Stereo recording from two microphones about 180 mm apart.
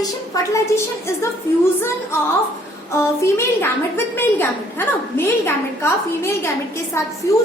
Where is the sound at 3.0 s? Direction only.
15° left (ahead or behind).